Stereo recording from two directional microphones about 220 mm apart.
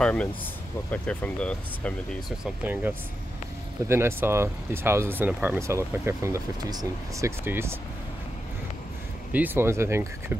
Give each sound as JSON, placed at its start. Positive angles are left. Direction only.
{"t": 0.0, "sound": "speech", "side_deg": 5}
{"t": 9.3, "sound": "speech", "side_deg": -10}